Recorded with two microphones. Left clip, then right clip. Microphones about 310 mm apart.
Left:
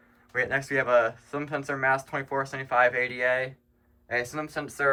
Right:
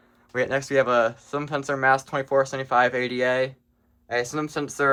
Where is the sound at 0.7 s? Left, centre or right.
Centre.